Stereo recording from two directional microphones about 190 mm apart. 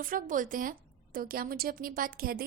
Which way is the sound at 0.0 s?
45° right (ahead or behind).